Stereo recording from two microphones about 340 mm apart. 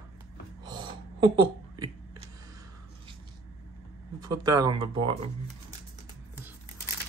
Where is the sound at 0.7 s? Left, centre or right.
Centre.